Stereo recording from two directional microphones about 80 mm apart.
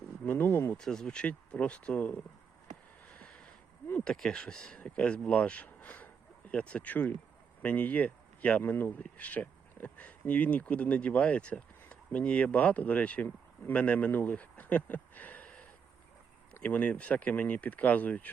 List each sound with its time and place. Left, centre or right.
0.3 s speech: left
0.8 s speech: centre
3.2 s a sound: centre
4.0 s speech: centre
16.6 s speech: centre